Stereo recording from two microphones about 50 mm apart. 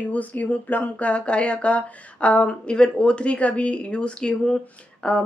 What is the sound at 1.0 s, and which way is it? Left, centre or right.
Speech, left.